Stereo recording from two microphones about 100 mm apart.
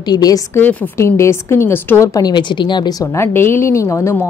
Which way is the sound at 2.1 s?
45° left (ahead or behind).